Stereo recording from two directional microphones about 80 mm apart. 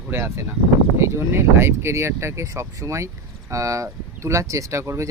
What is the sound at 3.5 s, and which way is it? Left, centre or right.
Speech, right.